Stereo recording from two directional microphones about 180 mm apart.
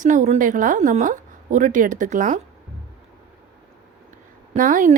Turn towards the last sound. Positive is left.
turn(degrees=-45)  # may be behind; listen again after turning